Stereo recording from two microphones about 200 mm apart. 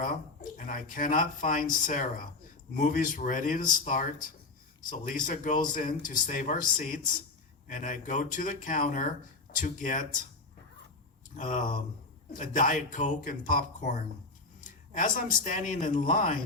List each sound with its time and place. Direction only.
0.1 s speech: 40° left (ahead or behind)
11.3 s speech: 40° left (ahead or behind)